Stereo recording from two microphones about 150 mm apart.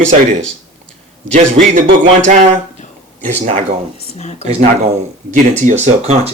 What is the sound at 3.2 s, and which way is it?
Speech, 55° right (ahead or behind).